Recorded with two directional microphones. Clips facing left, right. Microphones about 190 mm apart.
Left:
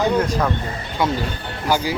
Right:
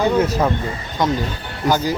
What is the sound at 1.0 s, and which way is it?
Speech, 10° left (ahead or behind).